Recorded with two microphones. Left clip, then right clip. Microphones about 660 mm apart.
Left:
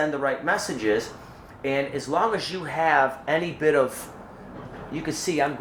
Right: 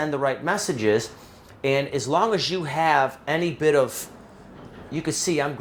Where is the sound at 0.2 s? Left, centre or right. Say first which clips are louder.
Even; right.